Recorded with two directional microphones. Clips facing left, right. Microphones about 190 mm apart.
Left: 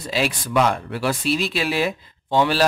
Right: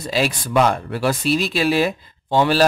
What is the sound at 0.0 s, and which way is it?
Speech, 40° right (ahead or behind).